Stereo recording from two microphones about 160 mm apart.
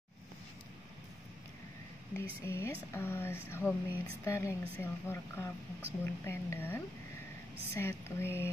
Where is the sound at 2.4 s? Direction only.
15° left (ahead or behind).